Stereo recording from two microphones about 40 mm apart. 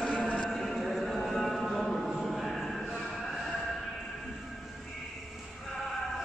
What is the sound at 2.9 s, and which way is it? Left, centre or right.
Train, centre.